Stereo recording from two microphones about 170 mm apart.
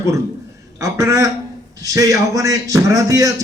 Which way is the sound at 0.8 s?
20° right (ahead or behind).